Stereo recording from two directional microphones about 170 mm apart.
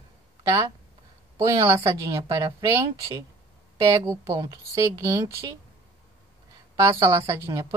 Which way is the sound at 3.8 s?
20° right (ahead or behind).